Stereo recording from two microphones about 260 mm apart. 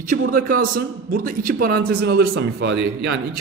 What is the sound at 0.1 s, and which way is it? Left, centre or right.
A man's voice, right.